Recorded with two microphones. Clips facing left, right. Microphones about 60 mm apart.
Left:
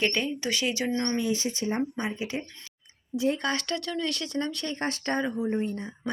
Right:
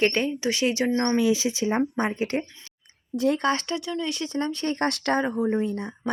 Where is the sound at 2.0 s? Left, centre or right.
Right.